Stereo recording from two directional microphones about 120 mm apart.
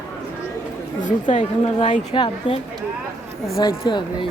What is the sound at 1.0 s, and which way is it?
A woman's voice, 90° left.